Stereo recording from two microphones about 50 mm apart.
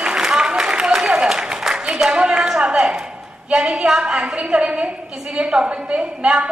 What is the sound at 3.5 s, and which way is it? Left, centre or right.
A woman's voice, centre.